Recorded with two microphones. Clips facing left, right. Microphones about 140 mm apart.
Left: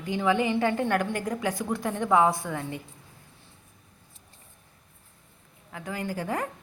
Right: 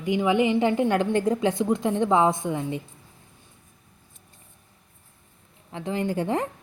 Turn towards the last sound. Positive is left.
turn(degrees=-25)  # may be behind; listen again after turning